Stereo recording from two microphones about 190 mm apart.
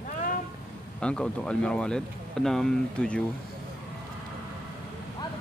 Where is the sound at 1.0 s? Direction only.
5° left (ahead or behind).